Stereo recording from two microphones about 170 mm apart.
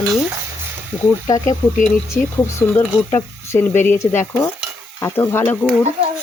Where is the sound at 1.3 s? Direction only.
20° left (ahead or behind).